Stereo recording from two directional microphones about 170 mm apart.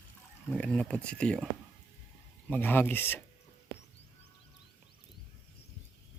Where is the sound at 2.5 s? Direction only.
10° left (ahead or behind).